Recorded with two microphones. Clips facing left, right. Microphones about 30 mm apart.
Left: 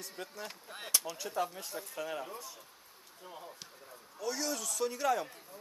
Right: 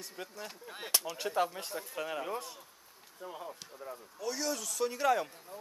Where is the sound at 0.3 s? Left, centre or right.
Centre.